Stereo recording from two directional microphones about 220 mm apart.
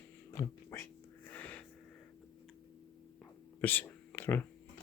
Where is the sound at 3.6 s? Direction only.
10° left (ahead or behind).